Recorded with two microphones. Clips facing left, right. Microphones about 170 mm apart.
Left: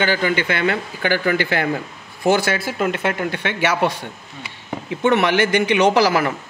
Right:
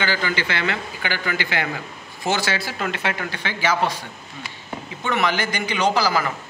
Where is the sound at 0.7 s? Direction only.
50° left (ahead or behind).